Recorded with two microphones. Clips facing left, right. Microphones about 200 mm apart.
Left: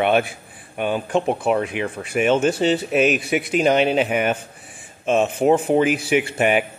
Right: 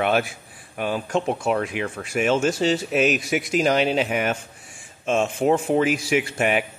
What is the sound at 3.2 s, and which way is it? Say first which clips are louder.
Speech: left 2 dB; 60° left (ahead or behind).